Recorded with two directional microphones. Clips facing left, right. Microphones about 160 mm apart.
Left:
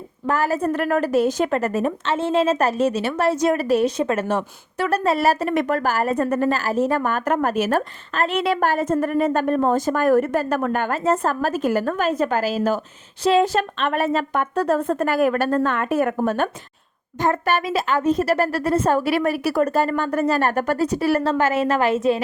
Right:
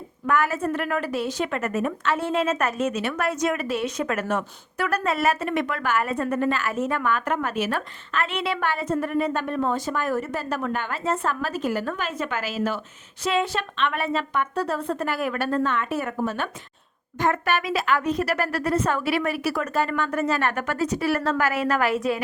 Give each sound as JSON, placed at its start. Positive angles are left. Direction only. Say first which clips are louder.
{"t": 0.3, "sound": "a woman's voice", "louder": "left 3 dB", "side_deg": 35}
{"t": 17.2, "sound": "a woman's voice", "louder": "left 3 dB", "side_deg": 35}